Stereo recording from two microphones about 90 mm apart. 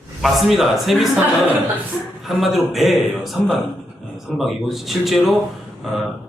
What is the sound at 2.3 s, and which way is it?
A man's voice, centre (ahead or behind).